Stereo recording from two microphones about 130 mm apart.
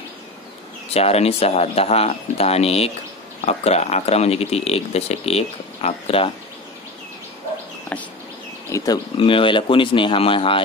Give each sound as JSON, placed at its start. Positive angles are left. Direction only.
{"t": 0.9, "sound": "speech", "side_deg": 50}
{"t": 7.9, "sound": "a sound", "side_deg": 10}
{"t": 8.7, "sound": "speech", "side_deg": 30}
{"t": 9.1, "sound": "speech", "side_deg": 40}